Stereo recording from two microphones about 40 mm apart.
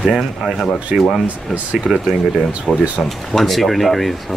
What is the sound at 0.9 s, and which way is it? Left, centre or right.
Speech, centre.